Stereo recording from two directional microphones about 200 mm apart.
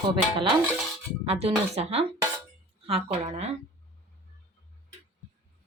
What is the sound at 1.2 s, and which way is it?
Speech, 30° right (ahead or behind).